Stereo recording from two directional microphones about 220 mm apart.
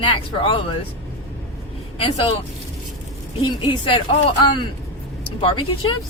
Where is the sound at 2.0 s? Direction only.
25° left (ahead or behind).